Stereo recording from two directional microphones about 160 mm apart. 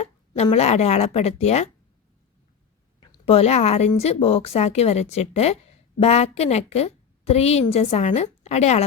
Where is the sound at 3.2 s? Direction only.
40° left (ahead or behind).